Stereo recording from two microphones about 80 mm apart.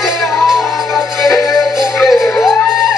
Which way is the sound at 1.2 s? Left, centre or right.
Centre.